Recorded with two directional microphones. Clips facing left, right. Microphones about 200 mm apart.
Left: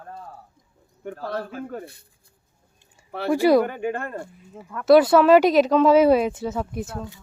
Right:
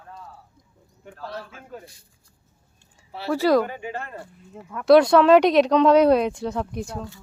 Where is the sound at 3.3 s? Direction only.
15° left (ahead or behind).